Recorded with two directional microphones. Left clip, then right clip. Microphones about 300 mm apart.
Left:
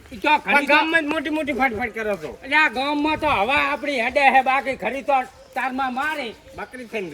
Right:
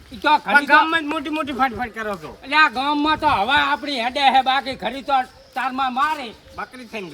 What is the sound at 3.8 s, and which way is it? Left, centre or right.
Speech, right.